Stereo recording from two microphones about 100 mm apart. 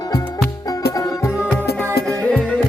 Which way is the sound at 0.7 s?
35° left (ahead or behind).